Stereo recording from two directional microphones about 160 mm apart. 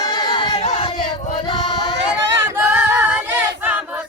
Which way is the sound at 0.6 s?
45° left (ahead or behind).